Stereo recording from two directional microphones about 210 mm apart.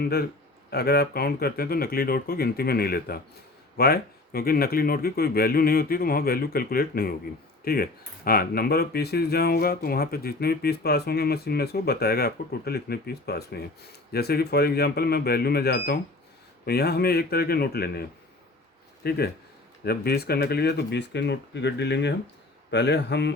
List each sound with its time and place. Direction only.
0.0 s speech: 50° left (ahead or behind)
19.0 s speech: 50° left (ahead or behind)